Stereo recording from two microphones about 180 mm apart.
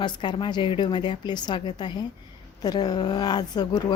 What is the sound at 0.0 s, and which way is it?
Speech, 25° left (ahead or behind).